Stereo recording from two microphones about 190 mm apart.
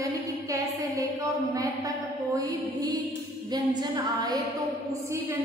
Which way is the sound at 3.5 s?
20° right (ahead or behind).